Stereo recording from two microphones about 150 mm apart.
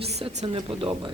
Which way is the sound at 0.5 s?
30° right (ahead or behind).